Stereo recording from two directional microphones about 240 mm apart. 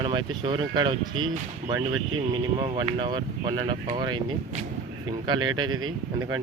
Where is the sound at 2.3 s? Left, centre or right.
Centre.